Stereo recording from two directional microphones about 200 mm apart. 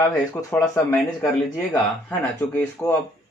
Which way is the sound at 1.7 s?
10° left (ahead or behind).